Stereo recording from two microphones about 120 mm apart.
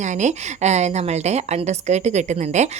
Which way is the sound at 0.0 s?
80° right.